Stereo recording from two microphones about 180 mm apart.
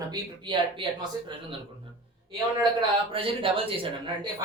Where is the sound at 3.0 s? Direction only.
30° right (ahead or behind).